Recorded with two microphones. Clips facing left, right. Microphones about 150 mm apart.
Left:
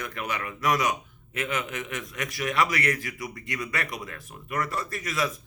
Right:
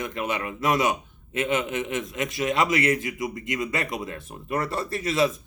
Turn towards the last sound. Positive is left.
turn(degrees=-25)  # may be behind; listen again after turning